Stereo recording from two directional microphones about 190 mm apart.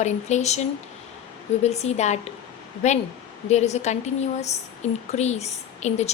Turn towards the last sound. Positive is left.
turn(degrees=35)  # may be behind; listen again after turning